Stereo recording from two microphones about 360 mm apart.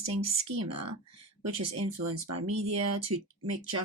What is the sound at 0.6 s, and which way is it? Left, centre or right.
Speech, right.